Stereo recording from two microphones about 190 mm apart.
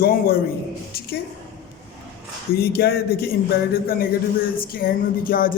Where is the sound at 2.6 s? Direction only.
55° left (ahead or behind).